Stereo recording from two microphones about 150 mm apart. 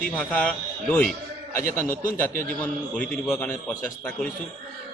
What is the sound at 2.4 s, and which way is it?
A man's voice, 10° left (ahead or behind).